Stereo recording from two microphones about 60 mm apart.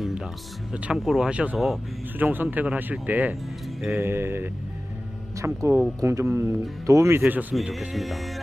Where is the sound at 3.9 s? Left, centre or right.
Right.